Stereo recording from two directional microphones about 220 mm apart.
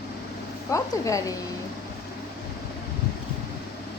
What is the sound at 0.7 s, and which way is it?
Speech, 15° left (ahead or behind).